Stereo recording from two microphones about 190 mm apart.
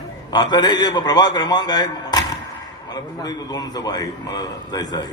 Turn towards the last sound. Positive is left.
turn(degrees=20)  # may be behind; listen again after turning